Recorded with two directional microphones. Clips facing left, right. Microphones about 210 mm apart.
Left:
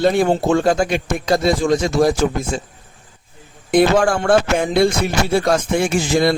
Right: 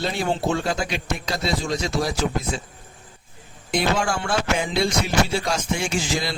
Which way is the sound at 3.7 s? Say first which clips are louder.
Left 9 dB; 55° left (ahead or behind).